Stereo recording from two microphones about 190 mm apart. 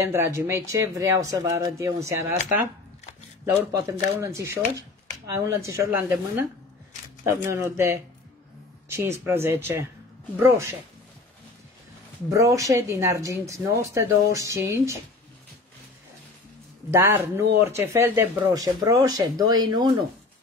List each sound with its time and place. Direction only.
0.0 s speech: 15° right (ahead or behind)
3.7 s speech: 15° right (ahead or behind)
12.3 s speech: 15° right (ahead or behind)
16.9 s speech: 15° right (ahead or behind)